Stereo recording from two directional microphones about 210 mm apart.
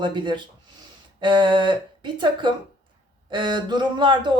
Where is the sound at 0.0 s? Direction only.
20° right (ahead or behind).